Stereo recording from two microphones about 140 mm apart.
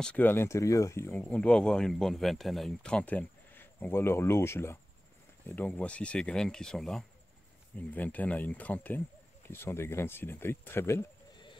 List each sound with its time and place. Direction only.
0.0 s speech: 10° left (ahead or behind)
1.2 s speech: 5° left (ahead or behind)